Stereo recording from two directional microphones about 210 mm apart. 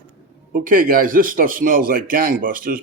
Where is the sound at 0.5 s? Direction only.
40° right (ahead or behind).